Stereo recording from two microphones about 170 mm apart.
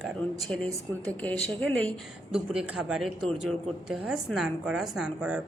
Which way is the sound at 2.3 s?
5° right (ahead or behind).